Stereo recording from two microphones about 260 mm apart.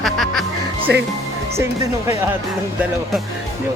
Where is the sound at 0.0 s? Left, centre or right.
Centre.